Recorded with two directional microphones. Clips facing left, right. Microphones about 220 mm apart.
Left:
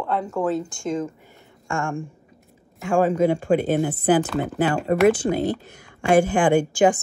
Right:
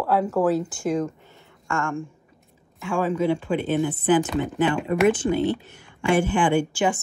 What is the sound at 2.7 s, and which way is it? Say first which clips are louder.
A woman's voice: left 4 dB; 45° left (ahead or behind).